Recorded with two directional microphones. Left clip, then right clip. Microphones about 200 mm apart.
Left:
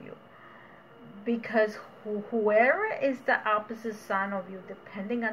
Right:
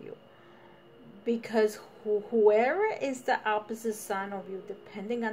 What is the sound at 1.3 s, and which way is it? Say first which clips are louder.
A woman's voice: left 1 dB; 65° right (ahead or behind).